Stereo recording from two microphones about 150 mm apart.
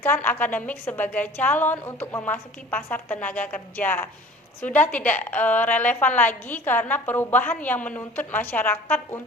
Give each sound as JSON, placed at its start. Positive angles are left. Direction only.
{"t": 0.0, "sound": "a woman's voice", "side_deg": 15}